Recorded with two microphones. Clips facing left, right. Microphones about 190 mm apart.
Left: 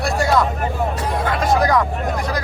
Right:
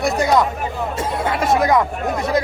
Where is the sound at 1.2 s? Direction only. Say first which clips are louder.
Right 1 dB; 25° right (ahead or behind).